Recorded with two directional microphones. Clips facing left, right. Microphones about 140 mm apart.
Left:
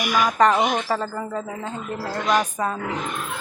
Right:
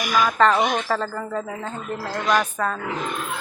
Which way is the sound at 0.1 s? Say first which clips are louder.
Even; 15° left (ahead or behind).